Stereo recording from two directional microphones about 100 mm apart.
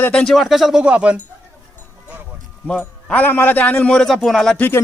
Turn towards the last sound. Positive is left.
turn(degrees=20)  # may be behind; listen again after turning